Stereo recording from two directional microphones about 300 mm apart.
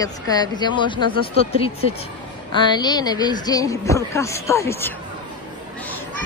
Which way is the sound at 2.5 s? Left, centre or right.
Centre.